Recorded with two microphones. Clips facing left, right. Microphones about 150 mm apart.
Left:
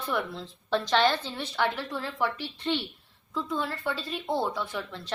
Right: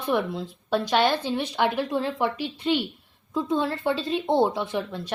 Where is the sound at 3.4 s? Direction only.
25° right (ahead or behind).